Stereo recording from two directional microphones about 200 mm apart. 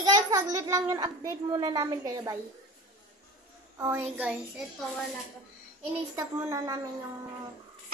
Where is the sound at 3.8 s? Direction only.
10° right (ahead or behind).